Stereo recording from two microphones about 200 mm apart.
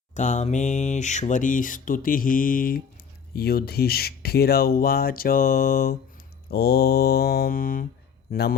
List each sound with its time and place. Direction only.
0.1 s speech: 35° left (ahead or behind)